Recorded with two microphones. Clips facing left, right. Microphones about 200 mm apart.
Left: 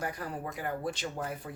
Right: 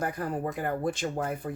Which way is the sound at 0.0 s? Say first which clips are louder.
Right 6 dB; 50° right (ahead or behind).